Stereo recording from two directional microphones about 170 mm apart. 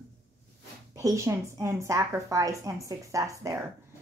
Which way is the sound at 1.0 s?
20° right (ahead or behind).